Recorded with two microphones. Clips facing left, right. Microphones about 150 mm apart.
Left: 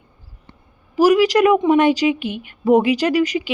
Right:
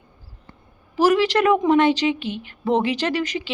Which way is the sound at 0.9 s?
10° left (ahead or behind).